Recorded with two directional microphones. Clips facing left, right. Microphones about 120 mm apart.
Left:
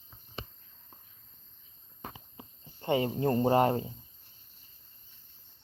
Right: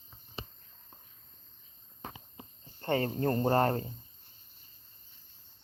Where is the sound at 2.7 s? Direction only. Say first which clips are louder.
Left 2 dB; 15° left (ahead or behind).